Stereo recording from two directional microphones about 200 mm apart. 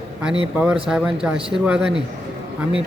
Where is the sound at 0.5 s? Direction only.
5° right (ahead or behind).